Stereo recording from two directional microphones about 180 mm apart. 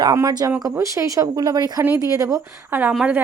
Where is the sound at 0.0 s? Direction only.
20° right (ahead or behind).